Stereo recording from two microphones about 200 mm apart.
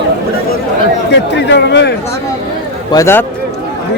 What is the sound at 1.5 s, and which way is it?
Speech, 60° left (ahead or behind).